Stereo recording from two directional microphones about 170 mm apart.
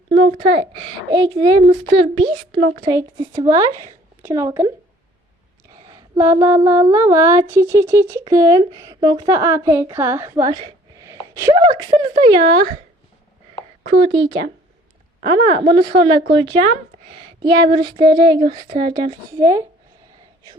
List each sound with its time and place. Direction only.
0.2 s a woman's voice: 40° right (ahead or behind)
1.1 s a woman's voice: 25° right (ahead or behind)
1.6 s a woman's voice: 40° right (ahead or behind)
2.8 s a woman's voice: 20° right (ahead or behind)
5.8 s a sound: 20° right (ahead or behind)
6.8 s a woman's voice: 20° right (ahead or behind)
10.9 s sneeze: 20° right (ahead or behind)
11.6 s a woman's voice: 30° right (ahead or behind)
14.0 s a woman's voice: 30° right (ahead or behind)